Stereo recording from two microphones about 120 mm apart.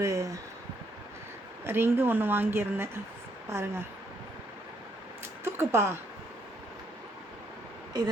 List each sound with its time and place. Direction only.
0.0 s speech: 25° right (ahead or behind)
1.6 s speech: 20° right (ahead or behind)
5.5 s speech: 20° right (ahead or behind)